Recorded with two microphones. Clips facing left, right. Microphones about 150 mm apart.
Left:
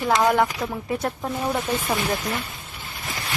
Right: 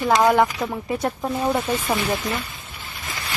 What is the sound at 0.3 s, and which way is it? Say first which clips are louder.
Speech: right 2 dB; 5° right (ahead or behind).